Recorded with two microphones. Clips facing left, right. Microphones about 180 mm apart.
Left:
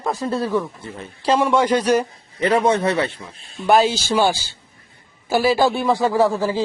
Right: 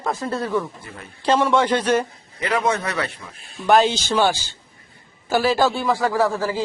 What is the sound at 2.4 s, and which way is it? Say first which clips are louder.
A man's voice: left 5 dB; 30° left (ahead or behind).